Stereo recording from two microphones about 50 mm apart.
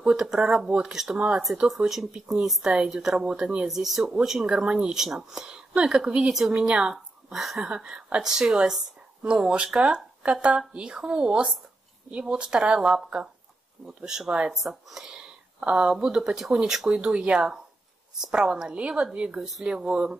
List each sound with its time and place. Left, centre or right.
0.0 s a woman's voice: centre
1.8 s a woman's voice: right; by 7.6 s centre
7.6 s a woman's voice: centre
13.8 s a woman's voice: centre
16.9 s a woman's voice: right